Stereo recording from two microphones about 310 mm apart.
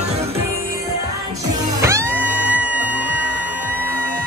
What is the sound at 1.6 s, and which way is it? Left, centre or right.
Music, centre.